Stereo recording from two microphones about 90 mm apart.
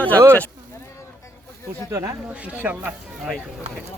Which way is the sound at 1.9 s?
40° right (ahead or behind).